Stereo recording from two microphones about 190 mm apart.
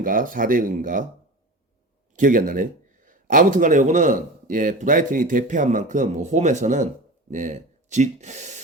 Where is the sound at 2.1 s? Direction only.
45° right (ahead or behind).